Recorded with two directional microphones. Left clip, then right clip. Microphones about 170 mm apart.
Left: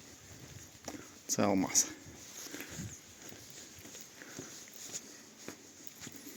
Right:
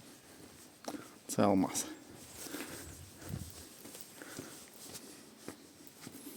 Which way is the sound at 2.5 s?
30° right (ahead or behind).